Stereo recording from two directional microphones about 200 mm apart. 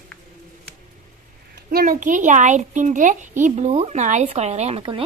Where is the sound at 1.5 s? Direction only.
45° right (ahead or behind).